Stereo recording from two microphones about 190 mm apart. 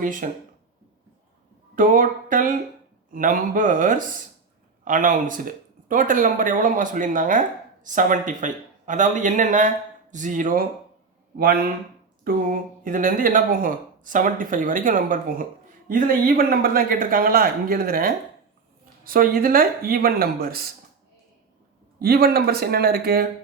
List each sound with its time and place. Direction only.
0.0 s speech: 45° right (ahead or behind)
1.7 s a man's voice: 45° right (ahead or behind)
12.3 s speech: 50° right (ahead or behind)
21.9 s speech: 55° right (ahead or behind)